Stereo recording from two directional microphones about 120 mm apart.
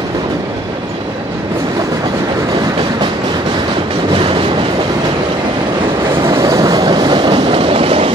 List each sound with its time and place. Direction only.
6.3 s train: 30° right (ahead or behind); by 8.1 s 50° right (ahead or behind)